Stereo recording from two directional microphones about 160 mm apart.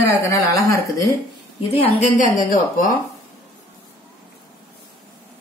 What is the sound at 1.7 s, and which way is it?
A woman's voice, 45° left (ahead or behind).